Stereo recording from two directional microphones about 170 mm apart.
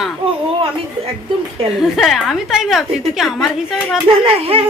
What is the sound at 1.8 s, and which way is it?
A woman's voice, centre (ahead or behind).